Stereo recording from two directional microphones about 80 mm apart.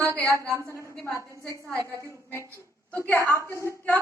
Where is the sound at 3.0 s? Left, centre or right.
Left.